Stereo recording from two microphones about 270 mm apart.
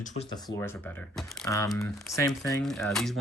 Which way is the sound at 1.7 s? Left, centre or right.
Centre.